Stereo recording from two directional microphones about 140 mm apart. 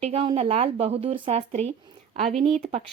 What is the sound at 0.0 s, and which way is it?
Speech, 45° right (ahead or behind).